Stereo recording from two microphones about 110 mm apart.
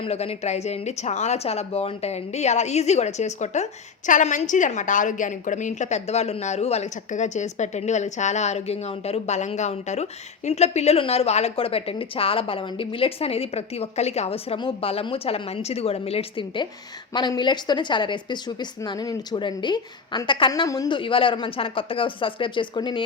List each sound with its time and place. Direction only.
0.0 s a woman's voice: 65° left (ahead or behind); by 20.5 s 45° left (ahead or behind)
20.7 s speech: 35° left (ahead or behind)
20.9 s speech: 55° left (ahead or behind)